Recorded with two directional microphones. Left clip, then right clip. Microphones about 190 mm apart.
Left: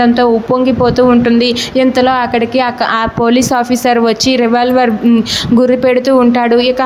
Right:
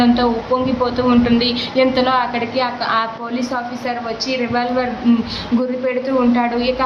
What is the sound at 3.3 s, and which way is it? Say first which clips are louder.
Speech: left 11 dB; 45° left (ahead or behind).